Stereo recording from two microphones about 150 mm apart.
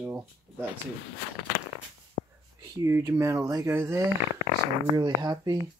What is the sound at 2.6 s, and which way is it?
Speech, 20° right (ahead or behind).